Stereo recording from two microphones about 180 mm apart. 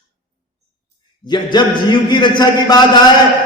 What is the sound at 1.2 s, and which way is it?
A man's voice, 25° left (ahead or behind).